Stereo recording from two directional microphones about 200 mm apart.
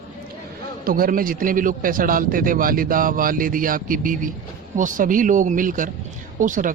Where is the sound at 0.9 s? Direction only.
45° right (ahead or behind).